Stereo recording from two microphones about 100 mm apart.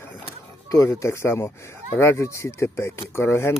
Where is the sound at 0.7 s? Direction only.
30° left (ahead or behind).